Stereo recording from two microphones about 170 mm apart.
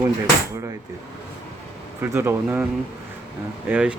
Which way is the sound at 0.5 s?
20° right (ahead or behind).